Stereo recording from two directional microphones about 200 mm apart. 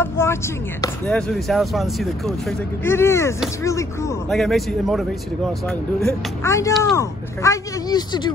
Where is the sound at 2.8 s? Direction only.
15° left (ahead or behind).